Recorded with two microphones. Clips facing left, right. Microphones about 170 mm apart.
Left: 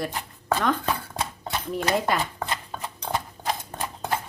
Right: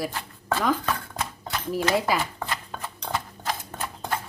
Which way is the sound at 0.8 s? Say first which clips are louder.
Left 1 dB; 25° left (ahead or behind).